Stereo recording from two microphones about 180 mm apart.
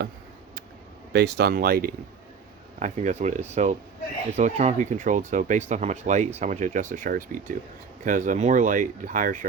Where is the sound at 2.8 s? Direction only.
40° right (ahead or behind).